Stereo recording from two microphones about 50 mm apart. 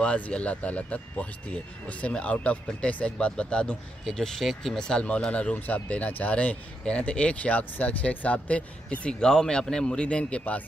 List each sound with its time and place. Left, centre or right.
0.0 s speech: left
4.0 s a man's voice: centre
9.2 s a man's voice: centre